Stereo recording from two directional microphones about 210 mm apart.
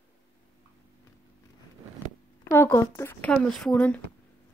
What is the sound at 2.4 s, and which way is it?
Speech, 15° left (ahead or behind).